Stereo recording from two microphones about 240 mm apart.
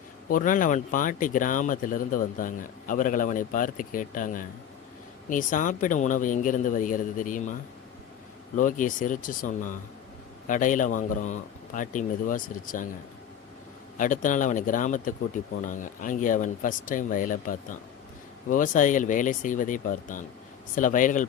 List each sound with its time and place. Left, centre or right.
0.3 s speech: left
8.5 s speech: left
13.9 s speech: left